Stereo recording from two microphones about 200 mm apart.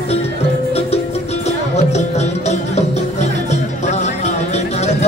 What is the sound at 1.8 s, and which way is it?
Music, 35° left (ahead or behind).